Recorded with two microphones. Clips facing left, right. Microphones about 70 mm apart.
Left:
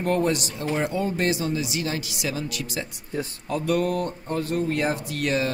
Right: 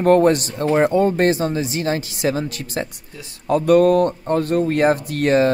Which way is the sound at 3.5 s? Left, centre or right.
Right.